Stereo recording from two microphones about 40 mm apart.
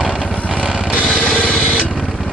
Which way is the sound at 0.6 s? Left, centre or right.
Centre.